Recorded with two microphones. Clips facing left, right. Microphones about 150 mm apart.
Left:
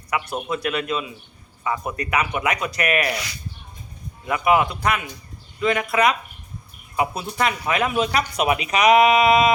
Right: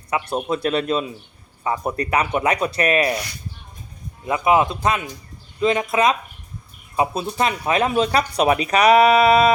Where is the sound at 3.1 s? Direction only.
90° left.